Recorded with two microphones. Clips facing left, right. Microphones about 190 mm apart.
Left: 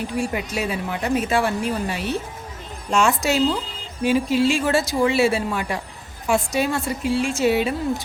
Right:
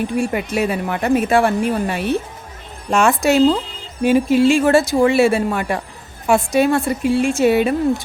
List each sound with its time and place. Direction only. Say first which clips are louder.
0.2 s a woman's voice: right 4 dB; 55° right (ahead or behind)